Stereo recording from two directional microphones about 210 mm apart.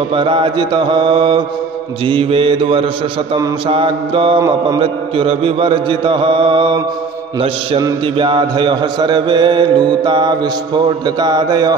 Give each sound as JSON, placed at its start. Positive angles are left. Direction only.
{"t": 0.1, "sound": "mantra", "side_deg": -25}